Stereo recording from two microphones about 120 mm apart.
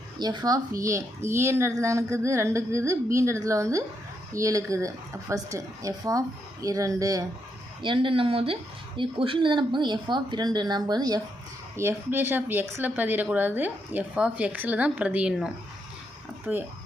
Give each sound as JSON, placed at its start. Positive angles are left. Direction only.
{"t": 0.2, "sound": "a woman's voice", "side_deg": -35}
{"t": 7.8, "sound": "speech", "side_deg": -45}
{"t": 11.8, "sound": "a woman's voice", "side_deg": -20}